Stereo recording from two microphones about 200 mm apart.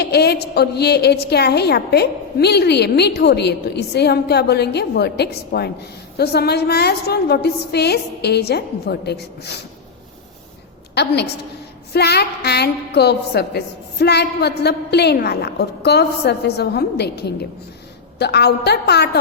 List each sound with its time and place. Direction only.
0.0 s a woman's voice: 55° left (ahead or behind)
10.9 s a woman's voice: 55° left (ahead or behind)